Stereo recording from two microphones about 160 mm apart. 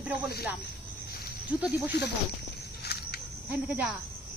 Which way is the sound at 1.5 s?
10° right (ahead or behind).